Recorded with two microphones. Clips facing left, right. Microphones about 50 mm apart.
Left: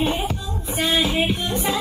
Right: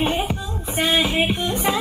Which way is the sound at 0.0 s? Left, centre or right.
Right.